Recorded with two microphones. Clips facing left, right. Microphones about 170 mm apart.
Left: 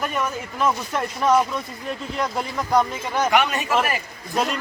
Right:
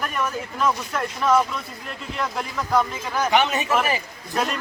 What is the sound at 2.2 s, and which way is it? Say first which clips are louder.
Speech: left 1 dB; 15° left (ahead or behind).